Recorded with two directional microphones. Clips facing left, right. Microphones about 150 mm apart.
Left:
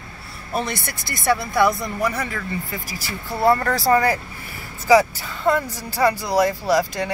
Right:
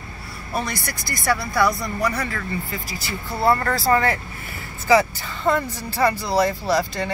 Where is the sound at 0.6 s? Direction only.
25° left (ahead or behind).